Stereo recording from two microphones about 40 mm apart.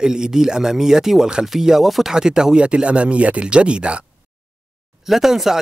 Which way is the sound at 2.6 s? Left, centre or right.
Right.